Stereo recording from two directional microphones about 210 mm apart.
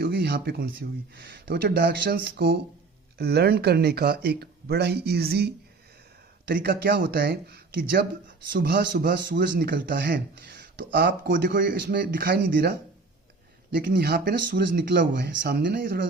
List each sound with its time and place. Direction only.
0.0 s a man's voice: 50° right (ahead or behind)